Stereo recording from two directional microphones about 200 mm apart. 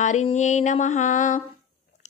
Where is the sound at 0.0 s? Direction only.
35° left (ahead or behind).